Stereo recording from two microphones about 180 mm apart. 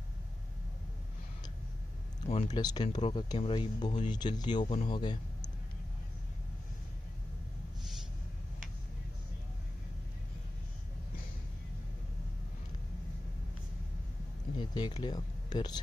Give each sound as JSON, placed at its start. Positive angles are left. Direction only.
{"t": 2.2, "sound": "speech", "side_deg": 35}
{"t": 14.6, "sound": "speech", "side_deg": 25}